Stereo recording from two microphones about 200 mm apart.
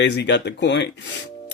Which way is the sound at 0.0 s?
60° left (ahead or behind).